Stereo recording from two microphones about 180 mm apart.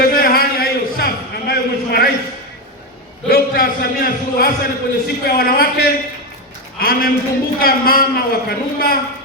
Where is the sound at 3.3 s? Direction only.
55° left (ahead or behind).